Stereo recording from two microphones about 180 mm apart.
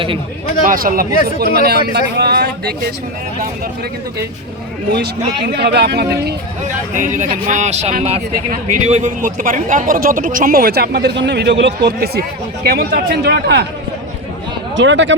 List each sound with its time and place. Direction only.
0.7 s speech: 55° right (ahead or behind)
5.5 s speech: 65° right (ahead or behind)
6.9 s speech: 45° right (ahead or behind); by 13.7 s 70° right (ahead or behind)
14.8 s speech: 85° right